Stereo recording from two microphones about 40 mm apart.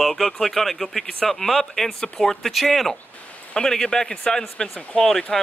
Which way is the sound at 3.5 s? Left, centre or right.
Centre.